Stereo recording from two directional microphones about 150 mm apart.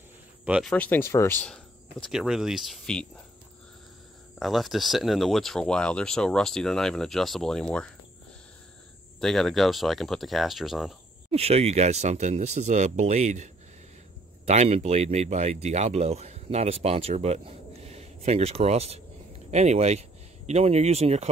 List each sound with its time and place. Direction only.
0.7 s speech: 10° left (ahead or behind)
1.5 s speech: centre (ahead or behind)
4.4 s speech: centre (ahead or behind)
9.2 s speech: centre (ahead or behind)
11.3 s speech: 45° right (ahead or behind)